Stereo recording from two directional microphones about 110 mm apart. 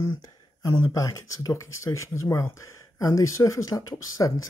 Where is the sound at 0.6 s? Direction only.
30° left (ahead or behind).